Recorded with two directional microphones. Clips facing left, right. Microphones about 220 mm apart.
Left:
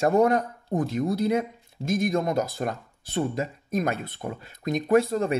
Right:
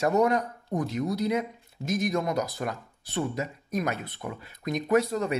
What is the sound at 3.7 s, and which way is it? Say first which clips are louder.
Speech: left 3 dB; 50° left (ahead or behind).